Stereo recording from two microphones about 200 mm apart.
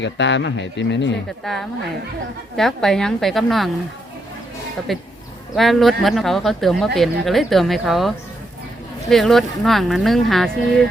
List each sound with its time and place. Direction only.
0.0 s speech: 65° left (ahead or behind)
1.5 s speech: centre (ahead or behind)
4.9 s speech: centre (ahead or behind)